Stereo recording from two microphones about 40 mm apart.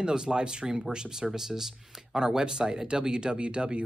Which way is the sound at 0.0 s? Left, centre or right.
Right.